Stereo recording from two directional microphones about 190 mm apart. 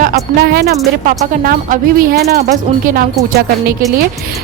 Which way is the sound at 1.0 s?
45° right (ahead or behind).